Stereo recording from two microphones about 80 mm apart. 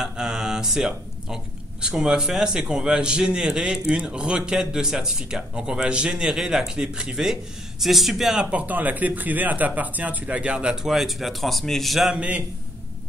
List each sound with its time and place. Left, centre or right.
0.0 s a man's voice: centre
12.2 s a man's voice: centre